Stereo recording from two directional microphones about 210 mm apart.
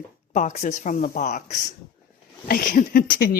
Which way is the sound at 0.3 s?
35° left (ahead or behind).